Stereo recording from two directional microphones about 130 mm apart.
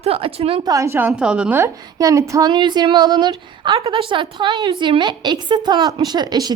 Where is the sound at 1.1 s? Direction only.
5° right (ahead or behind).